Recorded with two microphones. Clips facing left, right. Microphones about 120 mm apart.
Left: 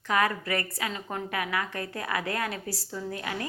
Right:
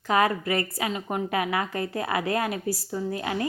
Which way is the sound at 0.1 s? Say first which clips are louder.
Right 4 dB; 25° right (ahead or behind).